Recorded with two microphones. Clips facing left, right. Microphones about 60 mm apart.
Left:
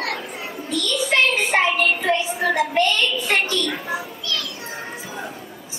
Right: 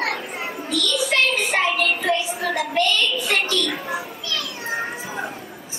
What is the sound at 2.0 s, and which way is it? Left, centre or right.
Music, left.